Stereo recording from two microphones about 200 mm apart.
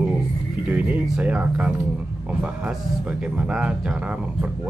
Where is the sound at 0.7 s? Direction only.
5° right (ahead or behind).